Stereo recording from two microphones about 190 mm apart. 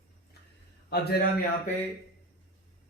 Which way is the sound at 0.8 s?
55° left (ahead or behind).